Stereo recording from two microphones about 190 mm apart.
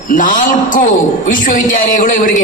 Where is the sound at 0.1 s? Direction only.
45° left (ahead or behind).